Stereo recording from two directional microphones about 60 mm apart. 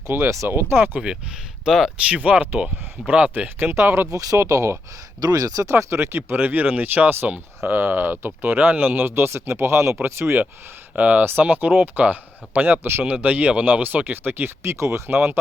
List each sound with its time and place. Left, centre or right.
0.1 s speech: right
0.9 s speech: centre
2.0 s speech: right
4.1 s speech: right
4.4 s speech: right
5.2 s speech: right
5.6 s speech: right
10.9 s speech: right